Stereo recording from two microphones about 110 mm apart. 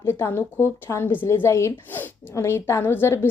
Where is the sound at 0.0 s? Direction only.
20° left (ahead or behind).